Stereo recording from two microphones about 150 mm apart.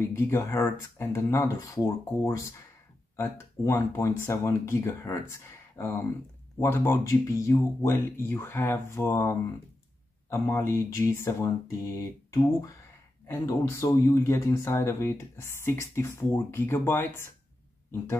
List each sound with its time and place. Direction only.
0.0 s speech: 20° left (ahead or behind)
10.5 s speech: 20° left (ahead or behind)